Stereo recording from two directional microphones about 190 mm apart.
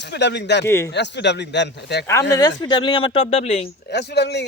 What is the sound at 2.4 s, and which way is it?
Speech, 20° left (ahead or behind).